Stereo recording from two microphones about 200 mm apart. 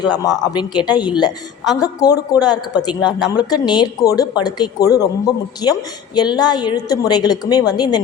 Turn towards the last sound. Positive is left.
turn(degrees=20)  # may be behind; listen again after turning